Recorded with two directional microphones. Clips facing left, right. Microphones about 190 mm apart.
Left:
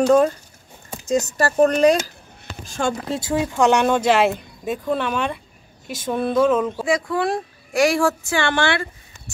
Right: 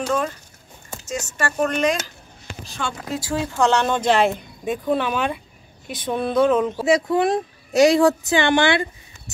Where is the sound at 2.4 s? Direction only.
45° left (ahead or behind).